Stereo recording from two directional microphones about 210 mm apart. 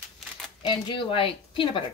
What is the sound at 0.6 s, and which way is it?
A woman's voice, 25° left (ahead or behind).